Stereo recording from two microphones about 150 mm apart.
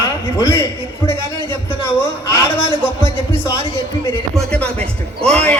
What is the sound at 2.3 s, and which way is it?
A man's voice, 20° left (ahead or behind).